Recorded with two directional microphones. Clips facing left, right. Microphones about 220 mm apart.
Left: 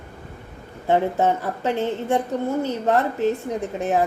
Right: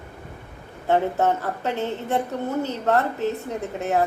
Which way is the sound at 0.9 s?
15° left (ahead or behind).